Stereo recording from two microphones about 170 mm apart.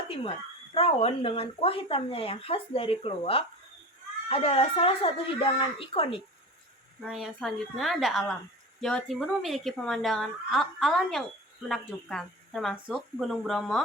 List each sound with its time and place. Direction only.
0.1 s speech: 35° left (ahead or behind)
7.0 s a woman's voice: 5° right (ahead or behind)